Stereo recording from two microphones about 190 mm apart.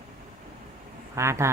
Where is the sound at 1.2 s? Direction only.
15° right (ahead or behind).